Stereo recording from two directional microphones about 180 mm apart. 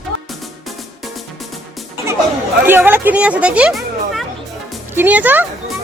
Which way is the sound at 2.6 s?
10° right (ahead or behind).